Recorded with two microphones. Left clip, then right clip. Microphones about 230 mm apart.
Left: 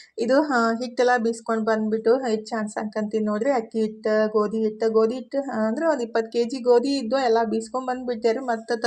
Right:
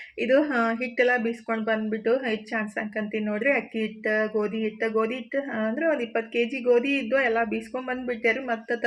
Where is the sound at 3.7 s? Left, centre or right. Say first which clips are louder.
Left 4 dB; left.